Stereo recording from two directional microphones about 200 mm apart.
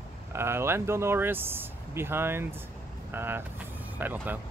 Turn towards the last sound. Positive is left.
turn(degrees=-10)  # may be behind; listen again after turning